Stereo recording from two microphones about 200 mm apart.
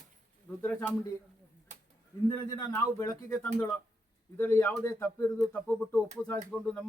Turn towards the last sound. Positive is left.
turn(degrees=5)  # may be behind; listen again after turning